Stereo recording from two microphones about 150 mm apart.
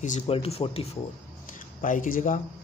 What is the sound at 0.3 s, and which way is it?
Speech, 40° left (ahead or behind).